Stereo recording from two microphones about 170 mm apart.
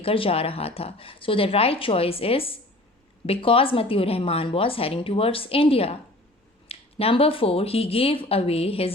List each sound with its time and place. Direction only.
0.0 s a woman's voice: 35° left (ahead or behind)